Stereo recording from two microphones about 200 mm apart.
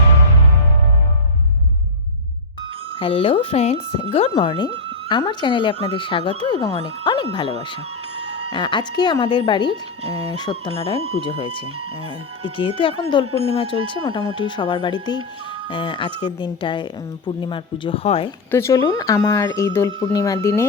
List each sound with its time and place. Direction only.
3.0 s a woman's voice: 25° left (ahead or behind)
8.5 s a woman's voice: 25° left (ahead or behind)
12.5 s a woman's voice: 25° left (ahead or behind)
18.5 s speech: 15° left (ahead or behind)